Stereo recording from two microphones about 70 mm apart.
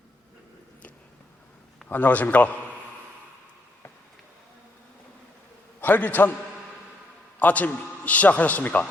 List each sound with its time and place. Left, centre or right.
1.9 s a man's voice: left
5.8 s a man's voice: left
7.3 s a man's voice: left